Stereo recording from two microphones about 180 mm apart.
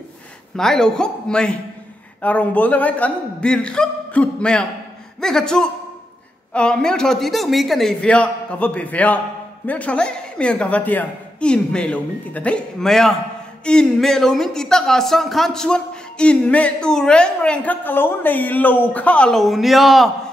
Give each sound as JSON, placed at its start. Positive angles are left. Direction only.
{"t": 0.6, "sound": "speech", "side_deg": 5}